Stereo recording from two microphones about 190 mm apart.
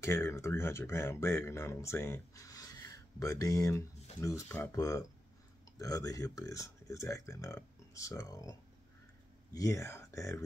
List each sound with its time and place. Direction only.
0.0 s speech: 15° left (ahead or behind)